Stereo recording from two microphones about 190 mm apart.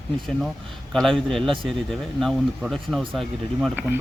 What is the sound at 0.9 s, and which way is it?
Speech, centre (ahead or behind).